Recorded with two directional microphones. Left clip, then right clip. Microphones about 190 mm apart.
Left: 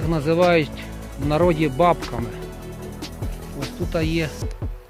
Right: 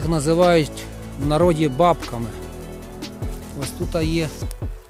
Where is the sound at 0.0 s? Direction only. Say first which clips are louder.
Right 1 dB; 30° right (ahead or behind).